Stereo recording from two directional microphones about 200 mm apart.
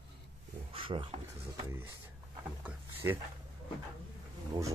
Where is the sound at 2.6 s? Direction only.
5° right (ahead or behind).